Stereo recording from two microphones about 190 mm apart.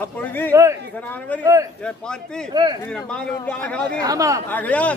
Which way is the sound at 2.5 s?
20° right (ahead or behind).